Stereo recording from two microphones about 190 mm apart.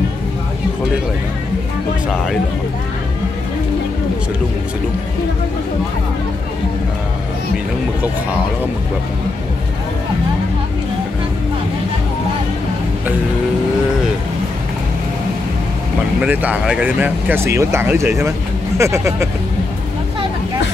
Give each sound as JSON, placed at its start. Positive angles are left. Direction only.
{"t": 16.2, "sound": "speech", "side_deg": -10}